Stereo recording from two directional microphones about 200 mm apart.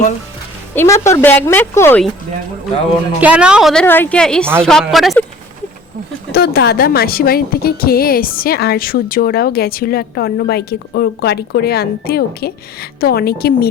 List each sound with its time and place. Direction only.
0.8 s a woman's voice: 15° left (ahead or behind)
3.2 s a woman's voice: 5° right (ahead or behind)
6.3 s a woman's voice: 55° left (ahead or behind)